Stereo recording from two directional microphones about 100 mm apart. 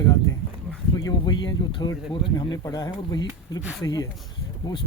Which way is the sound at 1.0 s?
50° left (ahead or behind).